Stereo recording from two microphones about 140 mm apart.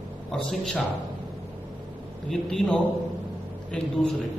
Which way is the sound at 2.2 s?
5° left (ahead or behind).